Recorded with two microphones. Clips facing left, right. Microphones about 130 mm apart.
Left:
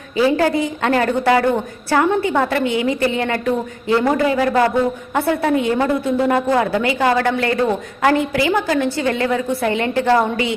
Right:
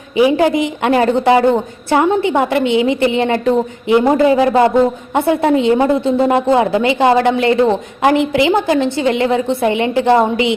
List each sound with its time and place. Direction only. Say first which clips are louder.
0.2 s a woman's voice: right 4 dB; 15° right (ahead or behind)